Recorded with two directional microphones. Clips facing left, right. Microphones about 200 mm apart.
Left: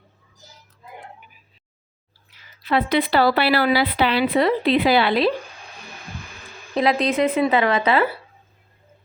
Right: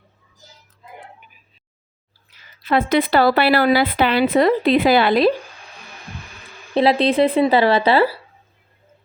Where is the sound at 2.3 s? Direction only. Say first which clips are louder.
Right 1 dB; 40° right (ahead or behind).